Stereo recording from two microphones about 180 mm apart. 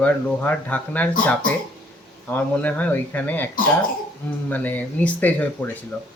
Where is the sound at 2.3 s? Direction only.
10° left (ahead or behind).